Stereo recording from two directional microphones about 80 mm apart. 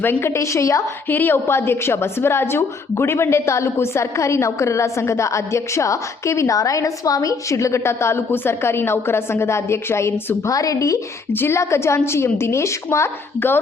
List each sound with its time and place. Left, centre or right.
0.0 s a woman's voice: left
1.0 s a woman's voice: left
11.3 s a woman's voice: left